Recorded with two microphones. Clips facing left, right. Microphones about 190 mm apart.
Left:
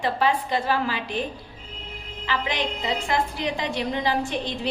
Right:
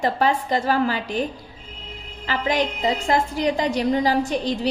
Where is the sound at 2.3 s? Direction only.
40° right (ahead or behind).